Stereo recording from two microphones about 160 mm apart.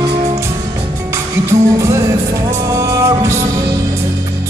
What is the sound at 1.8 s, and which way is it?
Music, 20° right (ahead or behind).